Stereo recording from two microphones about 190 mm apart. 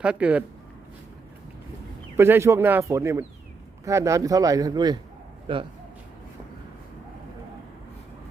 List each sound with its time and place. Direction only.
0.0 s speech: 5° right (ahead or behind)
2.1 s speech: 10° right (ahead or behind)